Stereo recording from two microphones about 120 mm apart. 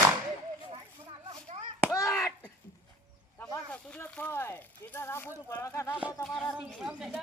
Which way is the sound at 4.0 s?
15° left (ahead or behind).